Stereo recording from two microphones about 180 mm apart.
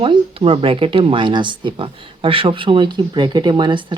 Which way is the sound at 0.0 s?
30° right (ahead or behind).